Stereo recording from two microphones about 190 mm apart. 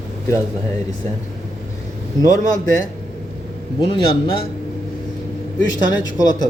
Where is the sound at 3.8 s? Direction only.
30° left (ahead or behind).